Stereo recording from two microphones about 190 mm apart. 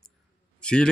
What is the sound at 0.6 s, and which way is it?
Speech, 5° left (ahead or behind).